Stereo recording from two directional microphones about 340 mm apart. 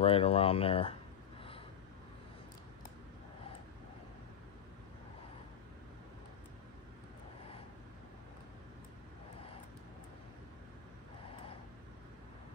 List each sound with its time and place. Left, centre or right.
0.0 s speech: centre